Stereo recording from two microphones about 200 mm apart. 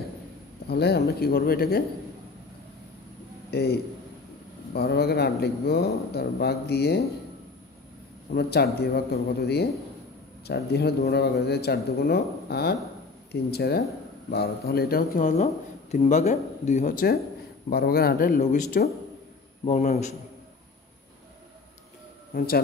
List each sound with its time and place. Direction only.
0.7 s speech: 55° left (ahead or behind)
3.4 s a man's voice: 55° left (ahead or behind)
4.7 s speech: 50° left (ahead or behind)
8.4 s speech: 55° left (ahead or behind); by 20.2 s 35° left (ahead or behind)